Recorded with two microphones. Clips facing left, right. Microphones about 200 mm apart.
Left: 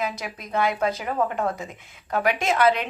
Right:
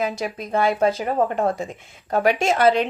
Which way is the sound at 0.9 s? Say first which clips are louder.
Right 4 dB; 35° right (ahead or behind).